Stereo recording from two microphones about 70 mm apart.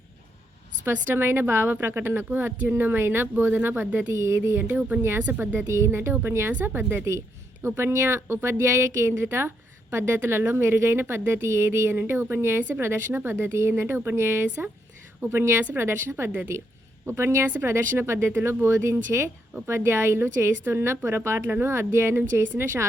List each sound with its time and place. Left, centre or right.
0.9 s speech: right
4.2 s speech: right
5.2 s speech: right
5.5 s speech: right
6.5 s speech: right
7.6 s speech: right